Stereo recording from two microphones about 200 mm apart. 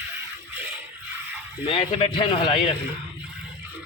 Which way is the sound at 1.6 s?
30° left (ahead or behind).